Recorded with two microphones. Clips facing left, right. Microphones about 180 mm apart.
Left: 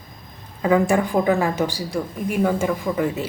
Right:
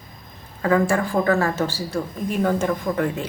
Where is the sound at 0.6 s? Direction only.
15° left (ahead or behind).